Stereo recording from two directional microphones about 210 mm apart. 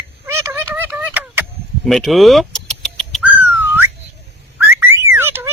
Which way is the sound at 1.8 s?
Centre (ahead or behind).